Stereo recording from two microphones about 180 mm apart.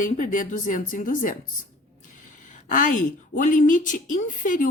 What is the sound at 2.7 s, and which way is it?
A woman's voice, 45° left (ahead or behind).